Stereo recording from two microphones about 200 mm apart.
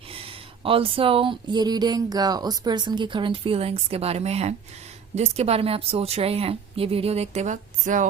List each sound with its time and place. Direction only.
0.1 s a woman's voice: 25° right (ahead or behind)